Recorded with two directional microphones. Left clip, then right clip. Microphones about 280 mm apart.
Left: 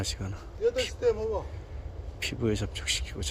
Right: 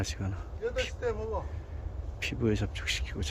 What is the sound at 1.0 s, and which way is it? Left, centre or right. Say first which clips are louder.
Speech: left 6 dB; left.